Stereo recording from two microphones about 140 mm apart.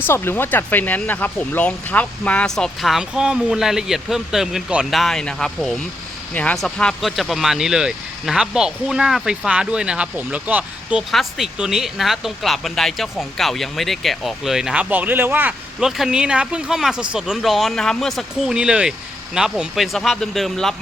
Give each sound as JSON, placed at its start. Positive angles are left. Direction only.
{"t": 0.1, "sound": "speech", "side_deg": 15}